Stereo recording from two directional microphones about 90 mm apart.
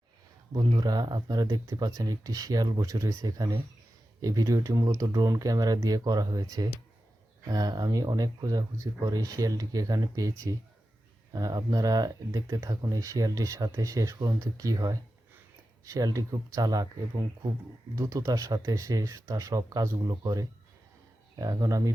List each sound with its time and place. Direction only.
0.5 s speech: 55° right (ahead or behind); by 3.2 s 35° right (ahead or behind)
3.2 s speech: 45° right (ahead or behind)